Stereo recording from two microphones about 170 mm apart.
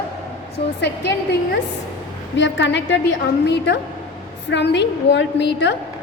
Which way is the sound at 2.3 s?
90° left.